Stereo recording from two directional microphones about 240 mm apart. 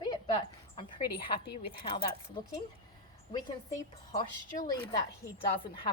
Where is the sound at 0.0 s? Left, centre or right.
Centre.